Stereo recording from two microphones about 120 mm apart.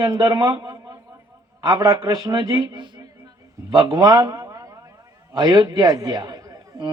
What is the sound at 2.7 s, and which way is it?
Speech, 40° right (ahead or behind).